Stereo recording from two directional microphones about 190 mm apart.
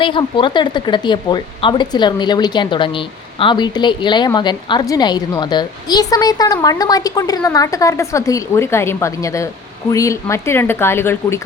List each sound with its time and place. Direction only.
0.0 s speech: 25° left (ahead or behind)